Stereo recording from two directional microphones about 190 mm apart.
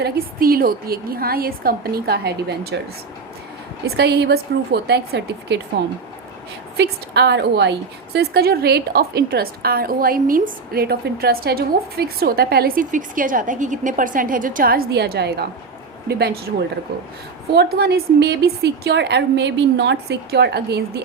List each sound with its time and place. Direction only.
0.0 s a woman's voice: 50° right (ahead or behind)
3.8 s a woman's voice: 60° right (ahead or behind)
5.8 s speech: 75° right (ahead or behind)
6.7 s a woman's voice: 60° right (ahead or behind)
17.5 s a woman's voice: 60° right (ahead or behind)